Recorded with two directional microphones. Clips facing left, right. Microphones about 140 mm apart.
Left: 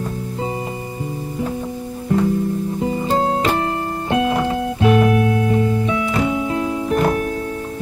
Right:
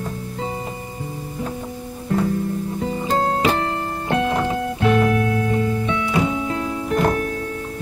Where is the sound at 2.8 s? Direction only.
15° left (ahead or behind).